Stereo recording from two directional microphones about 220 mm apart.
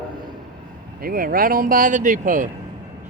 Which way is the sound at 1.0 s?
40° right (ahead or behind).